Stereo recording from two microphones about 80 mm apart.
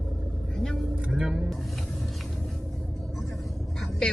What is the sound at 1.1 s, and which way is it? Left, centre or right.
Speech, centre.